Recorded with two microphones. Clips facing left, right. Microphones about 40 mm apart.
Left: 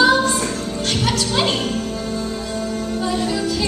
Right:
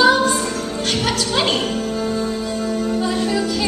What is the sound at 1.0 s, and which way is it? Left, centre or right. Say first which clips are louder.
Music: left 1 dB; centre.